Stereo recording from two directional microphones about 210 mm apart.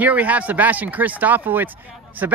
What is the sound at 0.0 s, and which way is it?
Speech, 5° right (ahead or behind).